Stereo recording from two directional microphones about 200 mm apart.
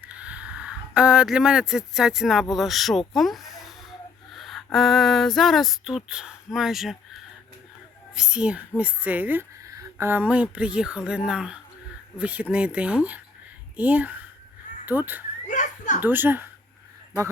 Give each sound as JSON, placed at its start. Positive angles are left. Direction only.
{"t": 0.0, "sound": "speech", "side_deg": -5}
{"t": 3.2, "sound": "music", "side_deg": 0}
{"t": 4.3, "sound": "speech", "side_deg": 0}
{"t": 8.1, "sound": "speech", "side_deg": -5}
{"t": 15.4, "sound": "a sound", "side_deg": 40}
{"t": 16.0, "sound": "speech", "side_deg": -10}